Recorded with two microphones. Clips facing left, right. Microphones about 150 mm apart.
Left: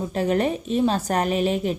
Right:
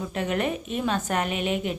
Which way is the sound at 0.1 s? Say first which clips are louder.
Left 5 dB; 35° left (ahead or behind).